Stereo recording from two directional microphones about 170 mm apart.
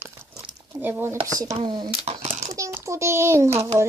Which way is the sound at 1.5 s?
25° right (ahead or behind).